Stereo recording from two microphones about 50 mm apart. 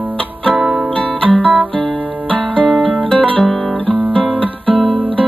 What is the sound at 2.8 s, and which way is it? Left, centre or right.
Music, right.